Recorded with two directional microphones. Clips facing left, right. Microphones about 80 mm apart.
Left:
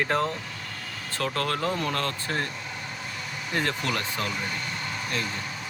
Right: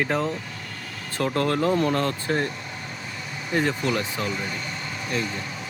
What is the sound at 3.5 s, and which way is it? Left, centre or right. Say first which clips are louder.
Speech: right 5 dB; centre.